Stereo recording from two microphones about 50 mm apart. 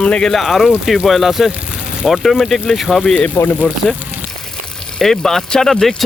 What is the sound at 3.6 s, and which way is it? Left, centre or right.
Speech, left.